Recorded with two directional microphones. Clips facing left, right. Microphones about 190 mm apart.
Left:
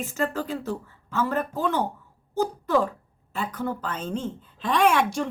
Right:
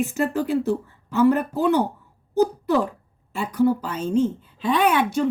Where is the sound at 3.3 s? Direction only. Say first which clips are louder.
Right 9 dB; 10° right (ahead or behind).